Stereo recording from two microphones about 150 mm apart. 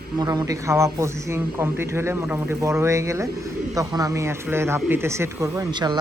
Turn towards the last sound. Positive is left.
turn(degrees=-30)  # may be behind; listen again after turning